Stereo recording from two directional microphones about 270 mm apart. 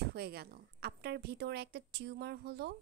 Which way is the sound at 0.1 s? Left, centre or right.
Right.